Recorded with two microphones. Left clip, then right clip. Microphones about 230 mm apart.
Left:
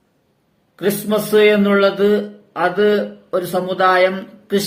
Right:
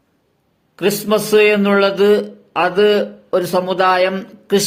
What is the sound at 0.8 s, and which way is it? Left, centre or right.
Speech, right.